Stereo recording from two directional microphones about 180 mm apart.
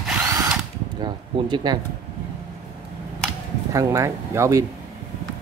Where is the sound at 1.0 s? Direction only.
25° right (ahead or behind).